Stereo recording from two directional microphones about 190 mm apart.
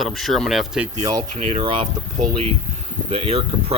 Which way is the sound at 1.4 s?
30° right (ahead or behind).